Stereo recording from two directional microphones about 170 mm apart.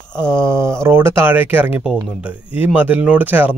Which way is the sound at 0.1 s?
15° right (ahead or behind).